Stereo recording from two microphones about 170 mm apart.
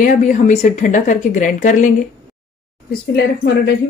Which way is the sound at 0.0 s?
50° left (ahead or behind).